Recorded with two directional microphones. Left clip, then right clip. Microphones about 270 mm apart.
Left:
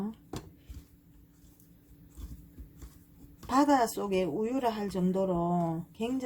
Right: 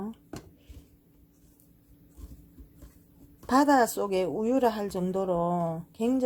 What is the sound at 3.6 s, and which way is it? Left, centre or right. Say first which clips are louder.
Speech: right 3 dB; right.